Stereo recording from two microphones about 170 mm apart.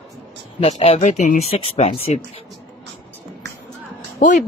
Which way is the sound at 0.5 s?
40° left (ahead or behind).